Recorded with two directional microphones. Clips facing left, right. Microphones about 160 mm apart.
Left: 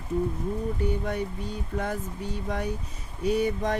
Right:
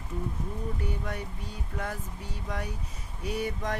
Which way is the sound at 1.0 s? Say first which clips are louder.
Left 7 dB; 25° left (ahead or behind).